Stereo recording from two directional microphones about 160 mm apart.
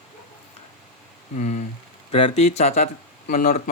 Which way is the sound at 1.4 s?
50° left (ahead or behind).